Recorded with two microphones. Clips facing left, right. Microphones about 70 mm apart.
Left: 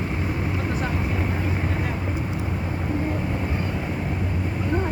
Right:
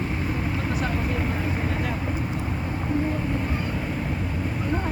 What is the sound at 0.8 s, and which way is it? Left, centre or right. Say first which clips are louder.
Vehicle: even; centre.